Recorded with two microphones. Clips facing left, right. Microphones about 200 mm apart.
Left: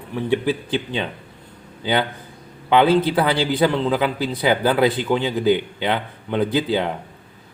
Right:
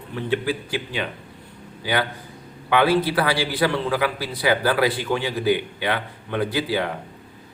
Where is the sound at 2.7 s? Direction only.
20° left (ahead or behind).